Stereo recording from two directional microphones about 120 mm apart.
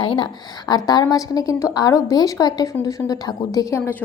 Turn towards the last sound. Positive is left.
turn(degrees=25)  # may be behind; listen again after turning